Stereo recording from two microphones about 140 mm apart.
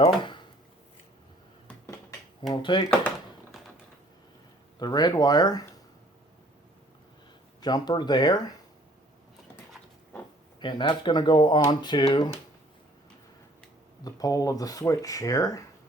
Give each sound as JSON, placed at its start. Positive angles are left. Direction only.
{"t": 0.0, "sound": "a sound", "side_deg": 35}
{"t": 2.5, "sound": "speech", "side_deg": 35}
{"t": 4.8, "sound": "speech", "side_deg": 30}
{"t": 7.6, "sound": "speech", "side_deg": 30}
{"t": 10.6, "sound": "speech", "side_deg": 35}
{"t": 14.0, "sound": "speech", "side_deg": 25}